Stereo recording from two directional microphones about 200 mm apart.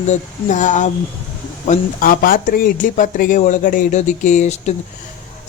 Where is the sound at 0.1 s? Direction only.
40° left (ahead or behind).